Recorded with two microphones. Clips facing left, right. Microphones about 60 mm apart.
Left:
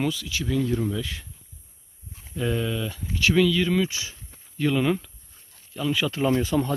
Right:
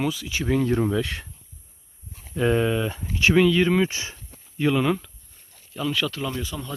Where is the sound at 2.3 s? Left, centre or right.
Right.